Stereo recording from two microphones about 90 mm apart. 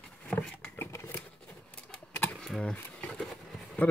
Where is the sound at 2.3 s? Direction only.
5° left (ahead or behind).